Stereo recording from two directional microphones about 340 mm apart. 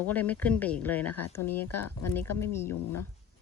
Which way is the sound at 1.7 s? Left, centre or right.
Left.